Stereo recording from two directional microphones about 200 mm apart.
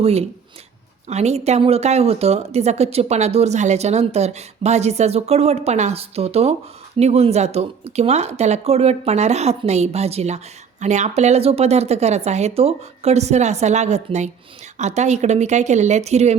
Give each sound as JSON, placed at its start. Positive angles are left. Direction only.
{"t": 0.0, "sound": "speech", "side_deg": -30}